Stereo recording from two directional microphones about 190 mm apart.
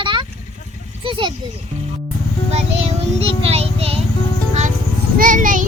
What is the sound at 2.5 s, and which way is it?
Music, 35° right (ahead or behind).